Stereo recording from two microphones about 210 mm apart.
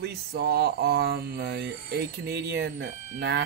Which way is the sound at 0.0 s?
50° right (ahead or behind).